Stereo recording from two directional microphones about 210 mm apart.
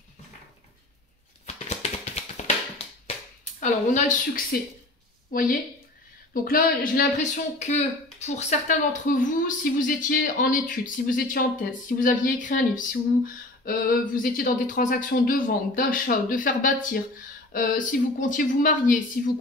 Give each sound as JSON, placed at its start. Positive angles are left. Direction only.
{"t": 1.4, "sound": "music", "side_deg": 30}
{"t": 3.1, "sound": "a sound", "side_deg": 35}
{"t": 5.3, "sound": "speech", "side_deg": 40}